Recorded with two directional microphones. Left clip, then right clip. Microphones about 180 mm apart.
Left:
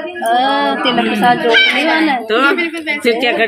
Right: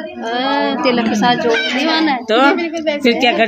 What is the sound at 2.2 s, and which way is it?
A woman's voice, 60° right (ahead or behind).